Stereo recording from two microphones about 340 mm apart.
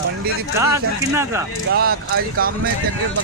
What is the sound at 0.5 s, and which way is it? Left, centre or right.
Speech, centre.